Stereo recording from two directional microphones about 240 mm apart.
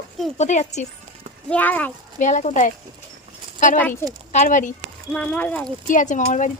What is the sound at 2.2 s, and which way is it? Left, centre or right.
Speech, left.